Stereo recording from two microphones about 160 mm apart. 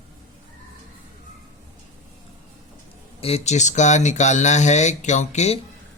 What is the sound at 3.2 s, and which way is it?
Speech, 40° left (ahead or behind).